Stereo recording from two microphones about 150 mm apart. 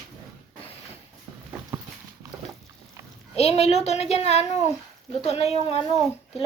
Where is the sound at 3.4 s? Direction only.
45° left (ahead or behind).